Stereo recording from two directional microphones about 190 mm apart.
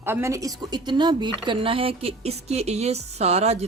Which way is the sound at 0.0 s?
15° right (ahead or behind).